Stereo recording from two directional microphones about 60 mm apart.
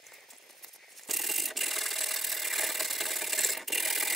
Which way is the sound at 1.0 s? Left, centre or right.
Centre.